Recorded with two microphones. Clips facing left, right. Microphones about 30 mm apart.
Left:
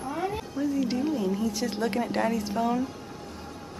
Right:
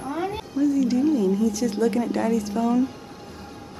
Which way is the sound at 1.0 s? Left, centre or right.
Centre.